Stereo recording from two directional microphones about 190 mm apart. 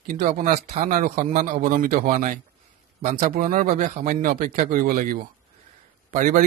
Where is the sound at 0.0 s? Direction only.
45° right (ahead or behind).